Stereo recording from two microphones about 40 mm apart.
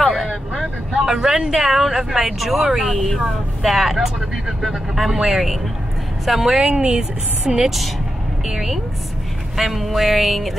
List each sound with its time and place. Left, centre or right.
0.0 s vehicle: centre
0.3 s vehicle: centre
1.5 s speech: centre
6.6 s speech: centre